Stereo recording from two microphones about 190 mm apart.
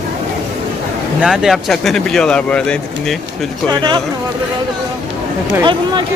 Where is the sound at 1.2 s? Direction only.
Centre (ahead or behind).